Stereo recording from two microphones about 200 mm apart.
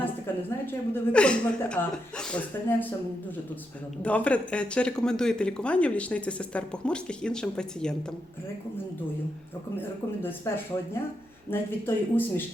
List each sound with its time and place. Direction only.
0.6 s speech: 10° left (ahead or behind)
4.0 s speech: 5° left (ahead or behind)
9.8 s speech: 10° left (ahead or behind)